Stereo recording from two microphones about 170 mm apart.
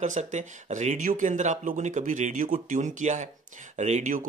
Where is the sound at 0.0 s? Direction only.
45° right (ahead or behind).